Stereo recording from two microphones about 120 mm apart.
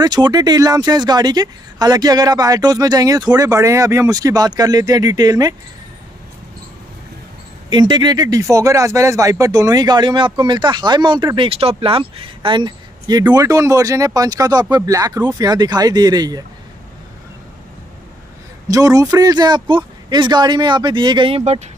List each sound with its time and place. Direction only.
0.0 s speech: 35° right (ahead or behind)
7.7 s speech: 35° right (ahead or behind)
11.3 s speech: 55° right (ahead or behind)
13.3 s speech: 30° right (ahead or behind)
18.7 s speech: 30° right (ahead or behind); by 21.6 s 60° right (ahead or behind)